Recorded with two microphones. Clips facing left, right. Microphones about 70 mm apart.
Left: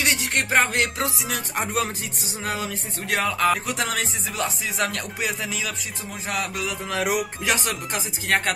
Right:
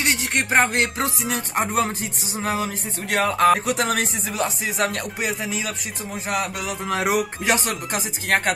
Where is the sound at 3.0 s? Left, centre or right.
Right.